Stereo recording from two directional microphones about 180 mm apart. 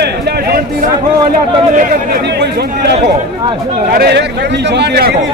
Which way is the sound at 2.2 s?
65° right (ahead or behind).